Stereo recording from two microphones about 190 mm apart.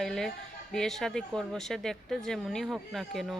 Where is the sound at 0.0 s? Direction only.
Centre (ahead or behind).